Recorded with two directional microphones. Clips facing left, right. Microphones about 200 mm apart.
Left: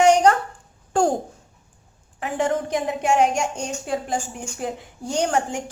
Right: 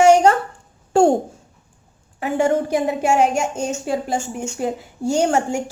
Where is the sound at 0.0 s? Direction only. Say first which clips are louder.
Right 3 dB; 5° right (ahead or behind).